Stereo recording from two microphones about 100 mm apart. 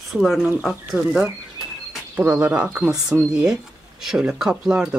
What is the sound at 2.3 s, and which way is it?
Speech, 10° right (ahead or behind).